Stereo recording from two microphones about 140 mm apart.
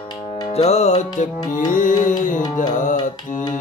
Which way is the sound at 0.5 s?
50° left (ahead or behind).